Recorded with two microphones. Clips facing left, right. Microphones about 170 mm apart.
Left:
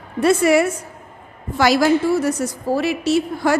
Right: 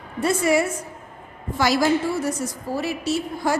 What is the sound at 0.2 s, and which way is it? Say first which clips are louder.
A woman's voice: left 5 dB; 75° left (ahead or behind).